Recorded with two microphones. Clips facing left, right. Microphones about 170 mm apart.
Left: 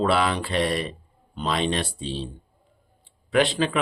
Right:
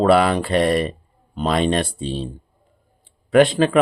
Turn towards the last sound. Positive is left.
turn(degrees=-50)  # may be behind; listen again after turning